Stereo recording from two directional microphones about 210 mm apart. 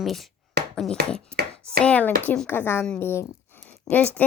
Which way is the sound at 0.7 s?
5° left (ahead or behind).